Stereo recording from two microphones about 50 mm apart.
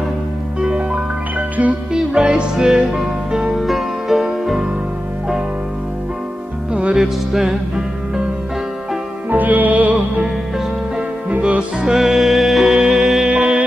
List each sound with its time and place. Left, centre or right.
0.6 s music: right
3.5 s music: centre
6.7 s music: right
7.0 s music: centre
9.3 s music: right
11.4 s music: right
11.9 s music: centre